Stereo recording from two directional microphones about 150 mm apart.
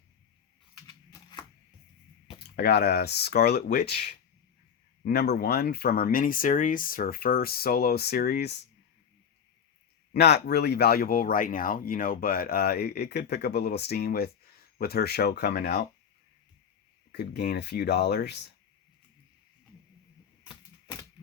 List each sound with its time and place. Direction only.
0.8 s a sound: 25° left (ahead or behind)
2.6 s speech: 90° left
10.1 s speech: 90° left
17.3 s speech: 90° left
20.4 s typewriter: 25° left (ahead or behind)